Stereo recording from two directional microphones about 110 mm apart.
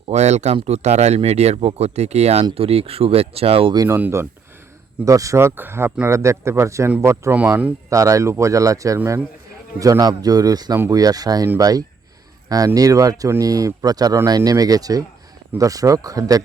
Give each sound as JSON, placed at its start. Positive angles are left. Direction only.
{"t": 0.1, "sound": "speech", "side_deg": -90}
{"t": 3.8, "sound": "speech", "side_deg": -20}
{"t": 7.9, "sound": "a man's voice", "side_deg": -30}